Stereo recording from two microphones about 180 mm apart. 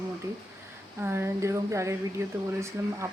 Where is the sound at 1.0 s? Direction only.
15° right (ahead or behind).